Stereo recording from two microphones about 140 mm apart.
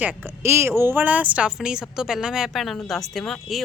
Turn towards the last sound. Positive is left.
turn(degrees=0)  # may be behind; listen again after turning